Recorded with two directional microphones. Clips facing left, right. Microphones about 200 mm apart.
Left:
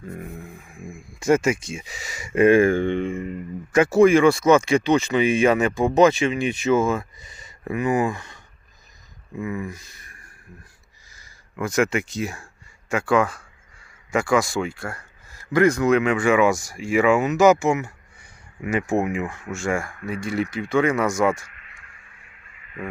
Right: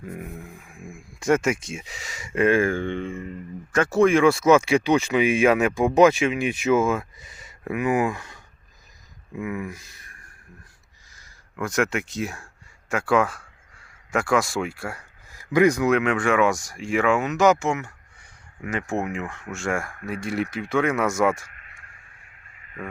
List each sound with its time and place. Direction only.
0.1 s speech: 5° right (ahead or behind)
9.4 s speech: 10° right (ahead or behind)
11.1 s speech: 5° left (ahead or behind)
22.5 s a sound: 45° right (ahead or behind)